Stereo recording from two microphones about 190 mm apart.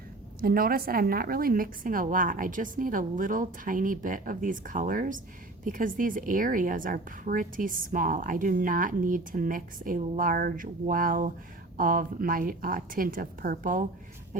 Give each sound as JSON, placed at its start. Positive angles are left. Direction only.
{"t": 0.4, "sound": "a woman's voice", "side_deg": -50}